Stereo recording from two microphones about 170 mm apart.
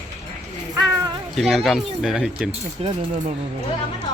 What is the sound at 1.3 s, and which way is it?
Speech, centre (ahead or behind).